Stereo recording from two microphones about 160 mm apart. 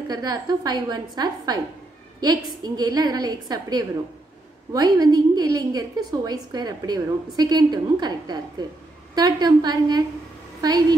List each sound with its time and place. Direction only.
0.1 s a woman's voice: 25° right (ahead or behind)